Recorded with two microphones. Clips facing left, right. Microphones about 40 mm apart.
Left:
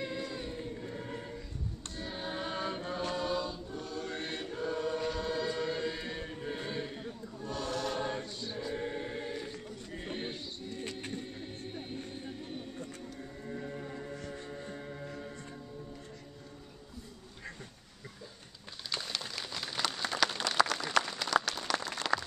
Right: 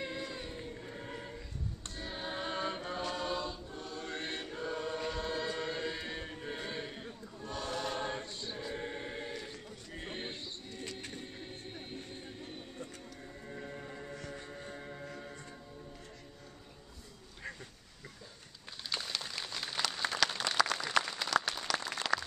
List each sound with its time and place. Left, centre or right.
0.0 s choir: centre
2.0 s chant: centre
3.7 s choir: right
4.1 s choir: centre
10.8 s printer: centre
11.1 s music: centre
18.9 s a sound: centre
20.2 s applause: centre